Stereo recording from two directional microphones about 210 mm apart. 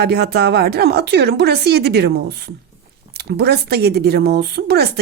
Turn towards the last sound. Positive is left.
turn(degrees=-50)  # may be behind; listen again after turning